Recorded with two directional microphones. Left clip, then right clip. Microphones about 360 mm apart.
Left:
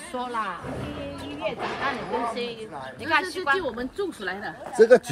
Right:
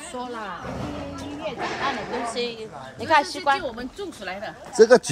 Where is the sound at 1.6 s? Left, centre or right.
Right.